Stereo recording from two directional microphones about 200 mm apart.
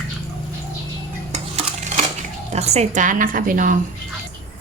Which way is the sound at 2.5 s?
30° right (ahead or behind).